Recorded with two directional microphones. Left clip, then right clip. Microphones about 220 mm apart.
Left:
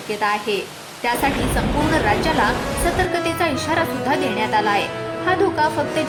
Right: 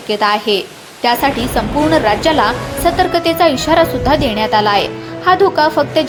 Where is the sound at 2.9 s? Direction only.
20° right (ahead or behind).